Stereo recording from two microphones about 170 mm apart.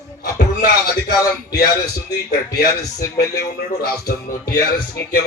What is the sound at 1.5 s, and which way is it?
Music, 65° left (ahead or behind).